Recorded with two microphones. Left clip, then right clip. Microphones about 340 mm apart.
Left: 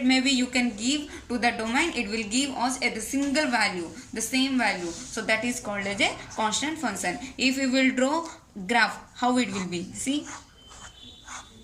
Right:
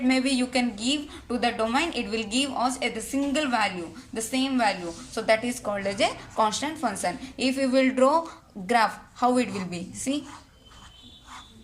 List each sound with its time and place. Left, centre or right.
0.1 s speech: centre